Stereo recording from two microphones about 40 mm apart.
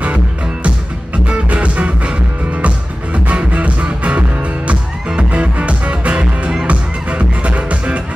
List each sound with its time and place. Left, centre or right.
0.7 s music: right